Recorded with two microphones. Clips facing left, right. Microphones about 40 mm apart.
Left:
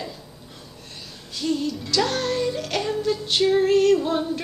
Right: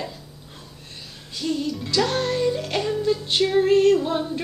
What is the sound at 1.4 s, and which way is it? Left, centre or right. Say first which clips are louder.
Music: left 1 dB; centre.